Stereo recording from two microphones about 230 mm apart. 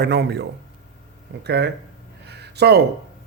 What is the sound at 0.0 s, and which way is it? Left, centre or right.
Speech, right.